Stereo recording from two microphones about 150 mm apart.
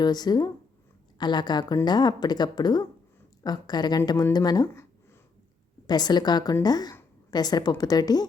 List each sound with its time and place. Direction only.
0.0 s speech: 25° left (ahead or behind)
5.9 s speech: 30° left (ahead or behind)